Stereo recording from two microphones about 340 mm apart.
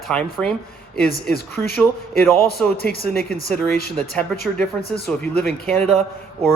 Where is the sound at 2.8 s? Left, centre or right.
Left.